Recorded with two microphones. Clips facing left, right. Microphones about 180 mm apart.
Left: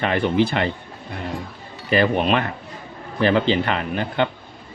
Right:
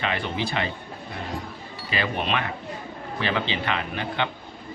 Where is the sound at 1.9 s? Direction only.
50° left (ahead or behind).